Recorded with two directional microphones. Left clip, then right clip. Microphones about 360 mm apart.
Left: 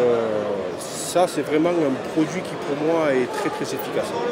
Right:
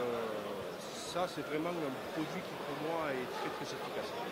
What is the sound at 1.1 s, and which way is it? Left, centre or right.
Speech, right.